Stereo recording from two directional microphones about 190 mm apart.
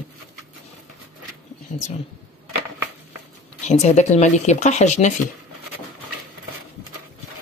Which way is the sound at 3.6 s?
35° left (ahead or behind).